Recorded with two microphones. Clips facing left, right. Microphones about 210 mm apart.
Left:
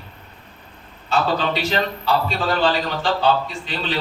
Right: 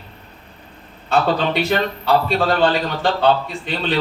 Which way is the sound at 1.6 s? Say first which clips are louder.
Right 3 dB; 55° right (ahead or behind).